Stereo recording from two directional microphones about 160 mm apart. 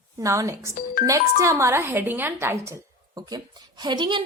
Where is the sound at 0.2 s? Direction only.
20° right (ahead or behind).